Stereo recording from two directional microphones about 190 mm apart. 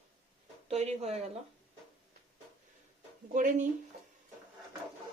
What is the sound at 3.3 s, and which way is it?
Speech, 40° right (ahead or behind).